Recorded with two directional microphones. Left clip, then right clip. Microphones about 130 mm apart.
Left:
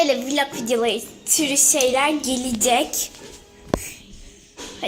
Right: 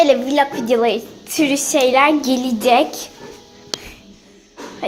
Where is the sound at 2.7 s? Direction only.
15° right (ahead or behind).